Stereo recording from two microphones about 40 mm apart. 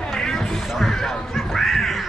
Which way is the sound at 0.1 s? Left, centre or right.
Centre.